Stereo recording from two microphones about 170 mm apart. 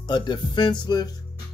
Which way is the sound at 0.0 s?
25° left (ahead or behind).